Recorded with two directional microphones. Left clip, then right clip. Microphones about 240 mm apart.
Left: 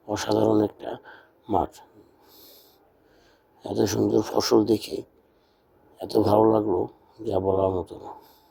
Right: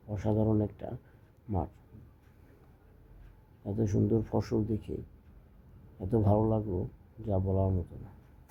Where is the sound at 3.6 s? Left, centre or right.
Left.